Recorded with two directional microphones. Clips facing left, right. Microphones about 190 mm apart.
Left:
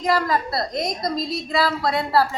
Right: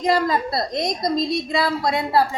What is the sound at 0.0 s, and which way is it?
A woman's voice, 20° right (ahead or behind).